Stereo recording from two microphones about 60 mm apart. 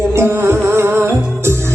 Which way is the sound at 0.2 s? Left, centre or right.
Right.